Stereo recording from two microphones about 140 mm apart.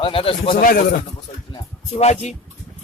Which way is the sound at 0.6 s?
80° left.